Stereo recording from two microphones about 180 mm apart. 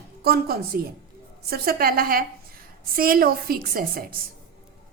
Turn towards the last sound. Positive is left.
turn(degrees=-55)  # may be behind; listen again after turning